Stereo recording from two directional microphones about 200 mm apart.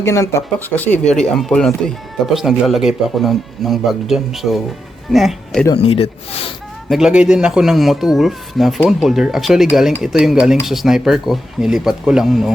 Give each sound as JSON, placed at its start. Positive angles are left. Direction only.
{"t": 0.0, "sound": "speech", "side_deg": 15}
{"t": 5.7, "sound": "speech", "side_deg": 30}
{"t": 6.8, "sound": "speech", "side_deg": 0}